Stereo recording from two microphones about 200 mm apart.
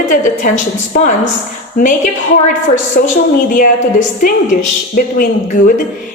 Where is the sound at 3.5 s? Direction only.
45° left (ahead or behind).